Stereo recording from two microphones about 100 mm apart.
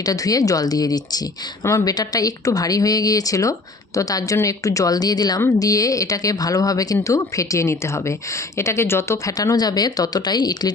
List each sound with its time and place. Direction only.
0.0 s speech: 40° left (ahead or behind)